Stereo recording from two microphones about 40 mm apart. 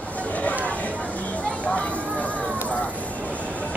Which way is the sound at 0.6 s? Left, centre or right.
Left.